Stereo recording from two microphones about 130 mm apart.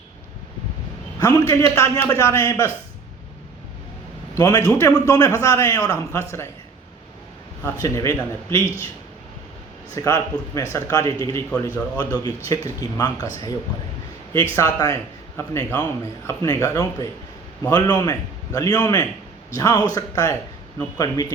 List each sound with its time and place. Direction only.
1.2 s speech: 25° left (ahead or behind)
4.4 s speech: 25° left (ahead or behind)
7.8 s speech: 25° left (ahead or behind)
9.9 s speech: 25° left (ahead or behind)
14.5 s speech: 25° left (ahead or behind)